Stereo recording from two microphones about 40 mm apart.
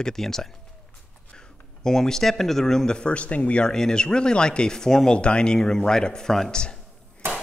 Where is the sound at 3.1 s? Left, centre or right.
Left.